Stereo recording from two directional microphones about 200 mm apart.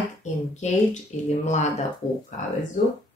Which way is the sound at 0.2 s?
35° left (ahead or behind).